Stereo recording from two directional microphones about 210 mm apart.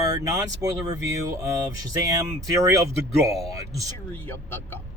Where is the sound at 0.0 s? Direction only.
15° right (ahead or behind).